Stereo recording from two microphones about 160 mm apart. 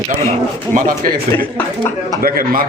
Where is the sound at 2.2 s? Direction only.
65° right (ahead or behind).